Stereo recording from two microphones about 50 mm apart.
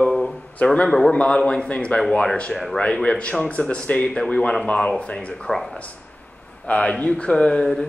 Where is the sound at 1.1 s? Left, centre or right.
Left.